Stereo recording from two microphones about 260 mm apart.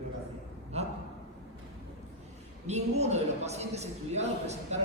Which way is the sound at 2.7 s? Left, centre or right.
Right.